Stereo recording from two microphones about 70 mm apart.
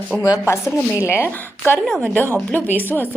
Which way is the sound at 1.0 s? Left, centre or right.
Left.